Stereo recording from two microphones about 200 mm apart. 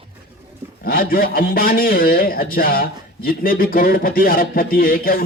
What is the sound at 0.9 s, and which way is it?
A man's voice, 45° left (ahead or behind).